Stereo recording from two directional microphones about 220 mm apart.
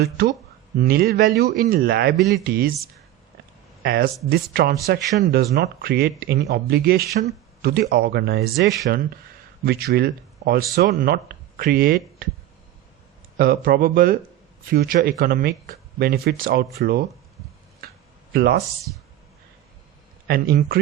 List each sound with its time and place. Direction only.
0.8 s speech: 45° right (ahead or behind)
2.1 s speech: centre (ahead or behind)
2.4 s speech: 40° right (ahead or behind)
3.8 s speech: 45° right (ahead or behind)
8.5 s speech: centre (ahead or behind)
9.6 s speech: 45° right (ahead or behind)
13.3 s speech: 40° right (ahead or behind)
18.3 s speech: 45° right (ahead or behind)
20.2 s speech: 45° right (ahead or behind)